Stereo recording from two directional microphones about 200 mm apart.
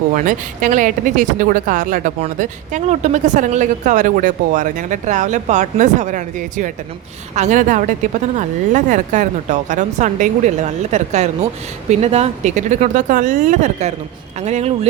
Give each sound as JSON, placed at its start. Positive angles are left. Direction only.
{"t": 0.2, "sound": "speech", "side_deg": -40}